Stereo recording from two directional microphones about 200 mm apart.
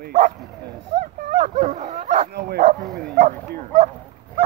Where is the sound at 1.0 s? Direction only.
40° right (ahead or behind).